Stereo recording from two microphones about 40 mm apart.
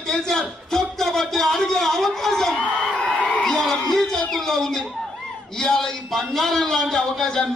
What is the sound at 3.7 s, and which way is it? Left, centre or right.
Music, centre.